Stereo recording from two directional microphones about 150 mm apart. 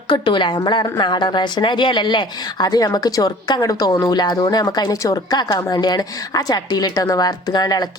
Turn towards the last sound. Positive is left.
turn(degrees=25)  # may be behind; listen again after turning